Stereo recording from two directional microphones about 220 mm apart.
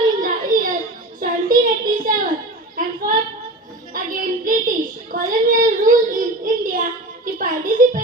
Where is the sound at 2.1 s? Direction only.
40° right (ahead or behind).